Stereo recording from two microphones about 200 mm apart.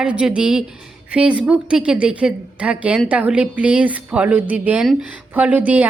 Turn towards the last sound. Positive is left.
turn(degrees=-10)  # may be behind; listen again after turning